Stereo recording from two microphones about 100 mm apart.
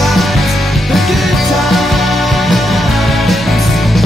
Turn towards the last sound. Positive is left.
turn(degrees=0)  # may be behind; listen again after turning